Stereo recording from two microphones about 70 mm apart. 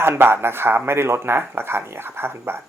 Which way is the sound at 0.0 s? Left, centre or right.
Right.